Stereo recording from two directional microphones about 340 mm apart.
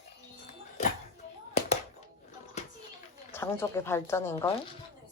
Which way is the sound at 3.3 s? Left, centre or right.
Centre.